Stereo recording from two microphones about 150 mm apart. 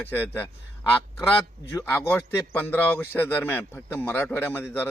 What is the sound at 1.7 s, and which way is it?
A man's voice, 15° left (ahead or behind).